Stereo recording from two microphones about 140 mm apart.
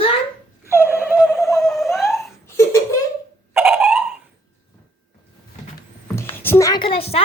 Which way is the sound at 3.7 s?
10° right (ahead or behind).